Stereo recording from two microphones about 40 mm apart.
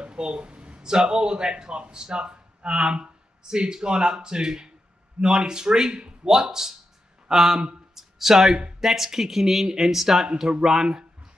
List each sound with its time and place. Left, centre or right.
0.0 s speech: right
7.9 s a sound: centre
8.9 s speech: centre